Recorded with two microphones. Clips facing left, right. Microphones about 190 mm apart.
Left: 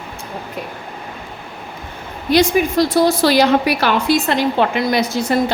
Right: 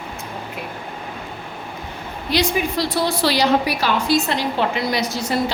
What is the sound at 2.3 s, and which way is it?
A woman's voice, 45° left (ahead or behind).